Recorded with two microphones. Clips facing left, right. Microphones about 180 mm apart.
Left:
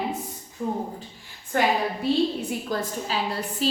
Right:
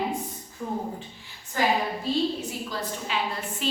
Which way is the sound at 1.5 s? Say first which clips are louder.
Left 3 dB; 60° left (ahead or behind).